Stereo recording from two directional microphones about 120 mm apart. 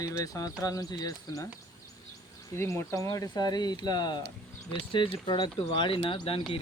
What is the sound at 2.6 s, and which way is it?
Speech, 25° left (ahead or behind).